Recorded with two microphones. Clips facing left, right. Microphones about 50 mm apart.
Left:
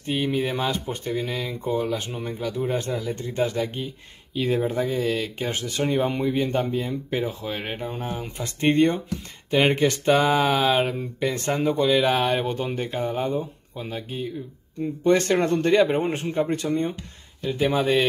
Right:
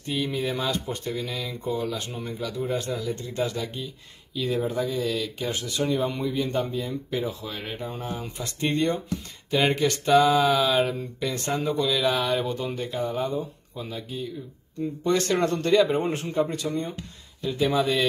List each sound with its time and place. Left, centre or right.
0.0 s speech: left
15.0 s speech: left